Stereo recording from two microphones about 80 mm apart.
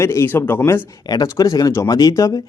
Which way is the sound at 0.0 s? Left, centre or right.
Left.